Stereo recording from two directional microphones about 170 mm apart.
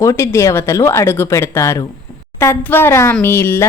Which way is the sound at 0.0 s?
15° left (ahead or behind).